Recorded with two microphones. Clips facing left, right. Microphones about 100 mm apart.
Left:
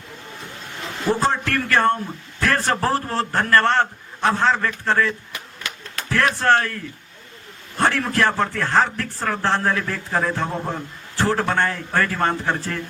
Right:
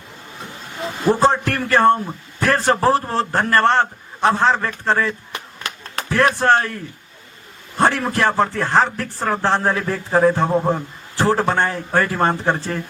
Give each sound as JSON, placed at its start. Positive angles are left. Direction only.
{"t": 0.6, "sound": "vehicle", "side_deg": 0}
{"t": 1.1, "sound": "a man's voice", "side_deg": -20}
{"t": 7.8, "sound": "a man's voice", "side_deg": -15}